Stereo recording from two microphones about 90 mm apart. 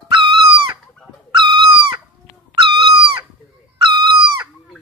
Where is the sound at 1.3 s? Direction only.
65° right (ahead or behind).